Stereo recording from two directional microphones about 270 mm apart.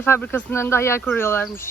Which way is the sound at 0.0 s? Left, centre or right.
Centre.